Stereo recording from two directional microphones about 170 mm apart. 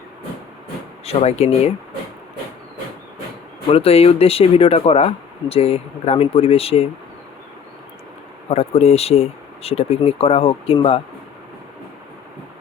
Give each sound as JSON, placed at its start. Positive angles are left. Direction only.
{"t": 1.0, "sound": "speech", "side_deg": 40}
{"t": 3.7, "sound": "speech", "side_deg": 35}
{"t": 8.4, "sound": "speech", "side_deg": 40}